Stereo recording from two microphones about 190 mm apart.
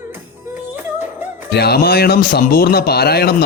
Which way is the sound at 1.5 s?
55° left (ahead or behind).